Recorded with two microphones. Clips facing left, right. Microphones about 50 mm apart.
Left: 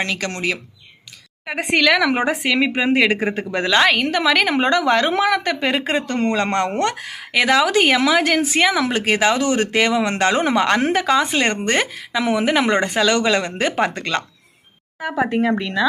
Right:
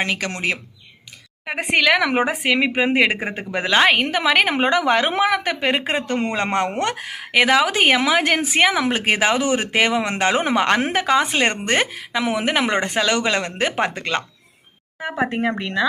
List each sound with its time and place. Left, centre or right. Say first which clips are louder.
0.0 s a woman's voice: even; centre
11.0 s speech: left 1 dB; centre
11.3 s a woman's voice: left 1 dB; centre
15.0 s speech: left 3 dB; right